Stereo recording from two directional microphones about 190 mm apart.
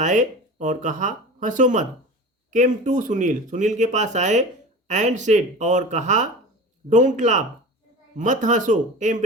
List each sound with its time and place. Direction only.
0.0 s speech: 40° right (ahead or behind)